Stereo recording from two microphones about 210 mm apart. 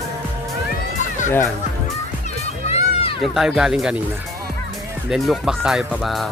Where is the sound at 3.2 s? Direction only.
Centre (ahead or behind).